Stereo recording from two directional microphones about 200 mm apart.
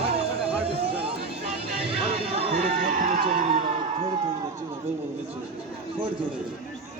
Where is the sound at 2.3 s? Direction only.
35° right (ahead or behind).